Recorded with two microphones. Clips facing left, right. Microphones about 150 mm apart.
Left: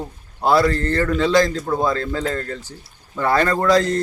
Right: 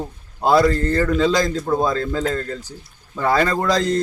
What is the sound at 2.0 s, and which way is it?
Speech, 5° right (ahead or behind).